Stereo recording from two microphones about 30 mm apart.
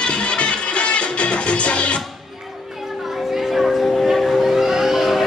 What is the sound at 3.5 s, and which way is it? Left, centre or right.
Music, centre.